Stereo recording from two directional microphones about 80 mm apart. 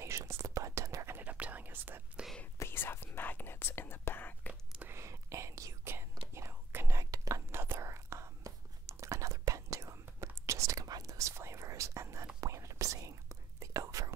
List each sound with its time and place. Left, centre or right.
0.0 s whispering: right
1.2 s whispering: centre
2.6 s whispering: left
4.9 s whispering: right